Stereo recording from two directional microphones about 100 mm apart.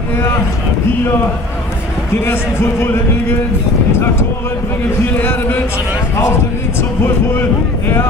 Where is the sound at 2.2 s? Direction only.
25° left (ahead or behind).